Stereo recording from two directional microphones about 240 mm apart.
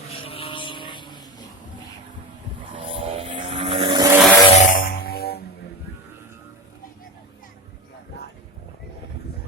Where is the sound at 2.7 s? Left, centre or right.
Right.